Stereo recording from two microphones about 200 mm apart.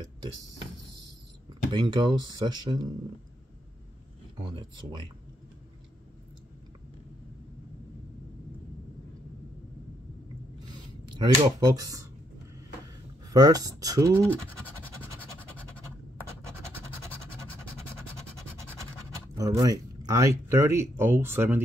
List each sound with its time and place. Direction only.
1.7 s speech: 25° right (ahead or behind)
4.4 s speech: 25° right (ahead or behind)
10.7 s writing: 20° right (ahead or behind)
13.3 s speech: 20° right (ahead or behind)
14.3 s scratch: 10° left (ahead or behind)
19.3 s speech: 15° right (ahead or behind)